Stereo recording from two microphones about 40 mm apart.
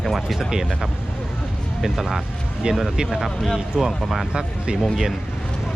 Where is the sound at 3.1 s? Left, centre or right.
Centre.